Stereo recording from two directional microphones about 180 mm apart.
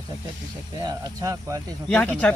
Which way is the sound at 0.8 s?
20° right (ahead or behind).